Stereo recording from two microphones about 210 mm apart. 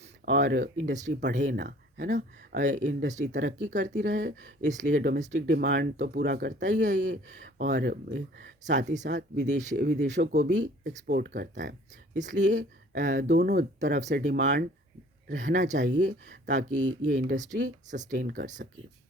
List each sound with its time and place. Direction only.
0.3 s speech: 50° right (ahead or behind)
7.6 s speech: 50° right (ahead or behind)
9.0 s speech: 50° right (ahead or behind)
9.5 s speech: 35° right (ahead or behind)
9.7 s speech: 50° right (ahead or behind)
10.0 s speech: 35° right (ahead or behind)
10.8 s speech: 55° right (ahead or behind); by 14.3 s 35° right (ahead or behind)
14.3 s speech: 55° right (ahead or behind)
15.3 s speech: 40° right (ahead or behind)
16.7 s speech: 90° right
17.2 s speech: 35° right (ahead or behind)